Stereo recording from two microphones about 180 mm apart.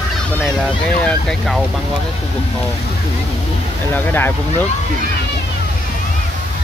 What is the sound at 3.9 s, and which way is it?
Speech, 10° left (ahead or behind).